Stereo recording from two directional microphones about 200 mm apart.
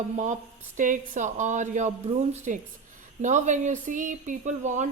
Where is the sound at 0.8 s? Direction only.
40° right (ahead or behind).